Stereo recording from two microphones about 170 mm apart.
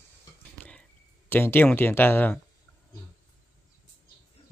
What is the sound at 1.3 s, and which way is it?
Speech, 10° left (ahead or behind).